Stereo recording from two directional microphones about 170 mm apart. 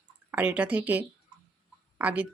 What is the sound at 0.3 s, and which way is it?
Speech, 10° right (ahead or behind).